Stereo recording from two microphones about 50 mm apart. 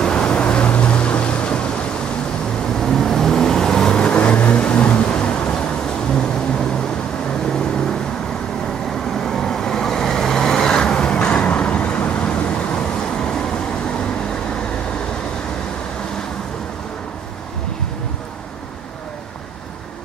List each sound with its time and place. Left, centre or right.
0.0 s waves: centre
2.8 s vehicle: centre
9.2 s vehicle: centre